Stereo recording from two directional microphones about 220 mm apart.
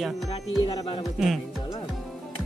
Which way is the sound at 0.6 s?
20° left (ahead or behind).